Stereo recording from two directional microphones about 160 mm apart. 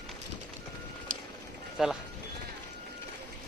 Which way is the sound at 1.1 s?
60° right (ahead or behind).